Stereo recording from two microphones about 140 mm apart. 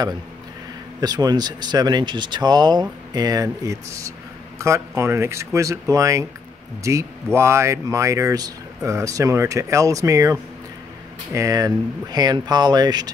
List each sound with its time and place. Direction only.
1.0 s speech: 30° right (ahead or behind)